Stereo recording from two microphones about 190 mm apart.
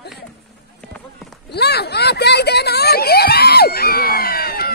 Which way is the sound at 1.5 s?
60° left (ahead or behind).